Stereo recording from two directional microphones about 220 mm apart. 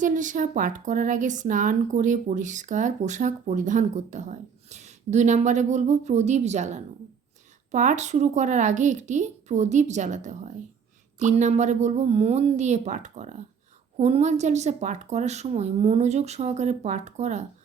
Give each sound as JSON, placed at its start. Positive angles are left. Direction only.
{"t": 0.0, "sound": "speech", "side_deg": -35}